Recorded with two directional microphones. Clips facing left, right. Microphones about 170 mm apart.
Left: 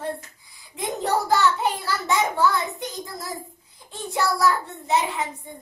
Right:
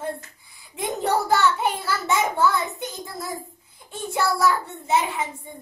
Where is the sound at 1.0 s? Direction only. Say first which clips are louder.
Even; 5° right (ahead or behind).